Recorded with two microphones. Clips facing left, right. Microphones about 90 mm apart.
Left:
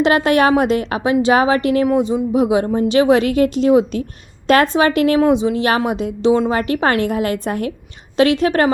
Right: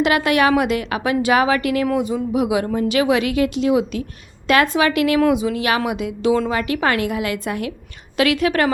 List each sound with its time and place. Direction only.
0.0 s a woman's voice: 35° left (ahead or behind)
6.5 s a woman's voice: 35° left (ahead or behind)